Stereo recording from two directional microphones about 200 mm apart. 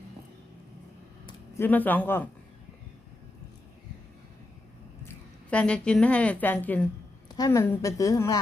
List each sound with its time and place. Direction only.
1.5 s a woman's voice: 10° left (ahead or behind)
5.0 s a woman's voice: 5° left (ahead or behind)